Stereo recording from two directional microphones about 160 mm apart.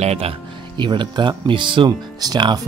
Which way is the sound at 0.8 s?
30° right (ahead or behind).